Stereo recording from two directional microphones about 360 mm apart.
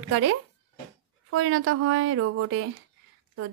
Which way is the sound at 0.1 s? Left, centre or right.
Right.